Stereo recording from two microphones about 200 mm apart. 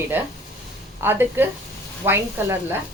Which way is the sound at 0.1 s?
10° right (ahead or behind).